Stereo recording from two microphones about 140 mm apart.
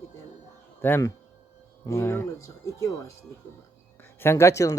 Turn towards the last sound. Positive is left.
turn(degrees=20)  # may be behind; listen again after turning